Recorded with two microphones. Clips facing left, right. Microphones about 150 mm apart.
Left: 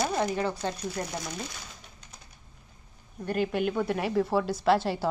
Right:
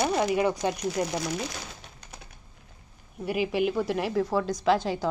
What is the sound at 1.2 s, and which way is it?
Speech, 90° right.